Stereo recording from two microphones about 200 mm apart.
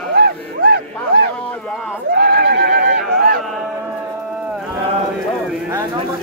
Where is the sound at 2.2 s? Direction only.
50° right (ahead or behind).